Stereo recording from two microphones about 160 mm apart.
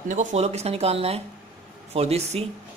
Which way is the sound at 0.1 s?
50° right (ahead or behind).